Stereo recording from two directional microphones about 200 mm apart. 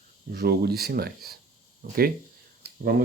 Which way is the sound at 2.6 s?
50° right (ahead or behind).